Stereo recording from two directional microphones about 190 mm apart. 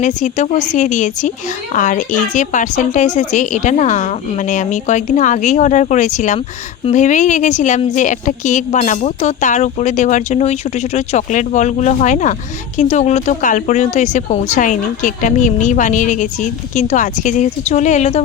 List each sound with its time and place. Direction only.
0.0 s a woman's voice: 40° left (ahead or behind)